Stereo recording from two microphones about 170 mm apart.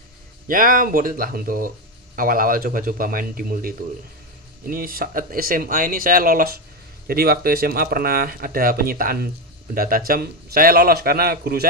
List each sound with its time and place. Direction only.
0.5 s speech: 55° right (ahead or behind)